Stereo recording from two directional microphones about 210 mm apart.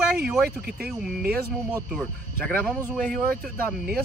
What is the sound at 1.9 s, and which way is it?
Speech, 5° left (ahead or behind).